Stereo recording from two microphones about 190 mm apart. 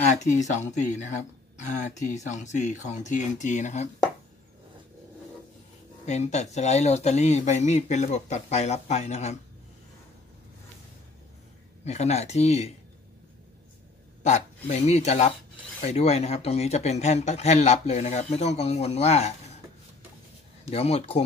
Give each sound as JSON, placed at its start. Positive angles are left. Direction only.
{"t": 0.1, "sound": "speech", "side_deg": 40}
{"t": 6.0, "sound": "speech", "side_deg": 35}
{"t": 11.8, "sound": "speech", "side_deg": 35}
{"t": 14.2, "sound": "speech", "side_deg": 35}
{"t": 20.7, "sound": "speech", "side_deg": 30}